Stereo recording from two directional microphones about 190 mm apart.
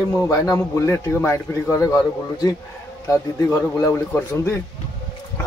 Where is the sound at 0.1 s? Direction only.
15° left (ahead or behind).